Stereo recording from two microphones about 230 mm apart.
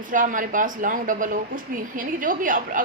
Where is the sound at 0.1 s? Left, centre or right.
Right.